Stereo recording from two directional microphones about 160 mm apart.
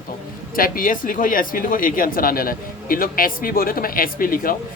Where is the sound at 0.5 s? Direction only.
60° left (ahead or behind).